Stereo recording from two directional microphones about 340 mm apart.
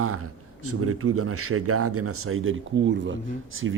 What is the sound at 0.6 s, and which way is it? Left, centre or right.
Speech, right.